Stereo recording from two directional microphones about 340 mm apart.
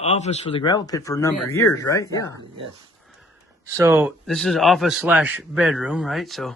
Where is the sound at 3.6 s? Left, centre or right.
Centre.